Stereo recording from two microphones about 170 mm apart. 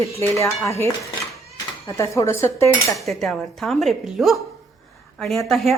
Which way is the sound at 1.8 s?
15° left (ahead or behind).